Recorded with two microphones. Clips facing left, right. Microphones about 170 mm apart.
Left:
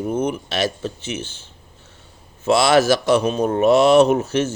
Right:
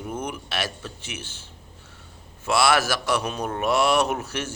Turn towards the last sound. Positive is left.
turn(degrees=25)  # may be behind; listen again after turning